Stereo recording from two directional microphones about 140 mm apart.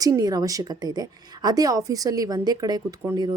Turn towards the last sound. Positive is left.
turn(degrees=-30)  # may be behind; listen again after turning